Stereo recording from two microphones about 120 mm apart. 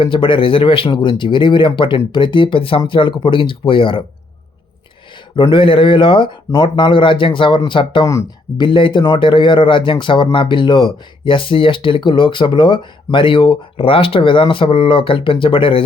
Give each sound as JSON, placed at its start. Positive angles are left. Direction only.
{"t": 0.0, "sound": "speech", "side_deg": 45}
{"t": 5.4, "sound": "speech", "side_deg": 45}
{"t": 8.0, "sound": "speech", "side_deg": 30}
{"t": 8.6, "sound": "speech", "side_deg": 45}